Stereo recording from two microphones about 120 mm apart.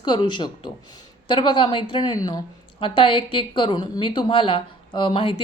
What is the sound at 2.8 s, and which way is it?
A woman's voice, 45° left (ahead or behind).